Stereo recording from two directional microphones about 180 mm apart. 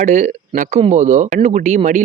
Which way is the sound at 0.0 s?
40° right (ahead or behind).